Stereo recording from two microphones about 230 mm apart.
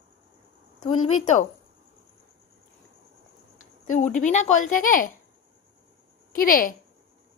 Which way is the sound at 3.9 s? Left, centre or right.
Left.